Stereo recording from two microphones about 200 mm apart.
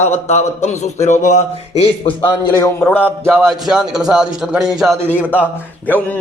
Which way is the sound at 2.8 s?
5° left (ahead or behind).